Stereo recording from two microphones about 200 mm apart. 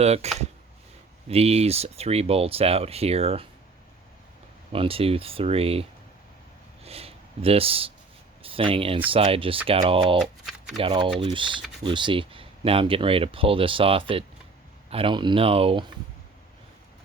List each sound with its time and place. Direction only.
0.0 s speech: 30° right (ahead or behind)
1.3 s speech: 30° right (ahead or behind)
4.7 s speech: 30° right (ahead or behind)
6.8 s speech: 30° right (ahead or behind)
10.2 s speech: centre (ahead or behind)
10.8 s speech: 25° right (ahead or behind)